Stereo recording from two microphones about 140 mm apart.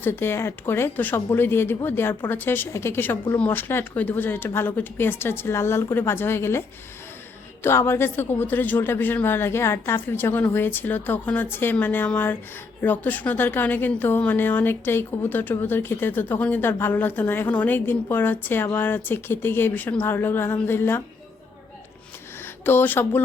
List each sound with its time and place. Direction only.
0.0 s a woman's voice: 15° left (ahead or behind)
22.6 s a woman's voice: 15° left (ahead or behind)